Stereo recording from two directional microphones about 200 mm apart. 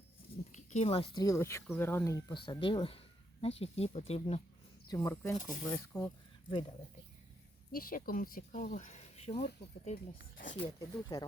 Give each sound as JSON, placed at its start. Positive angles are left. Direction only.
{"t": 0.5, "sound": "a woman's voice", "side_deg": 35}
{"t": 4.9, "sound": "speech", "side_deg": 15}
{"t": 5.4, "sound": "speech", "side_deg": 45}
{"t": 5.6, "sound": "speech", "side_deg": 5}
{"t": 7.7, "sound": "speech", "side_deg": 45}
{"t": 10.7, "sound": "speech", "side_deg": 20}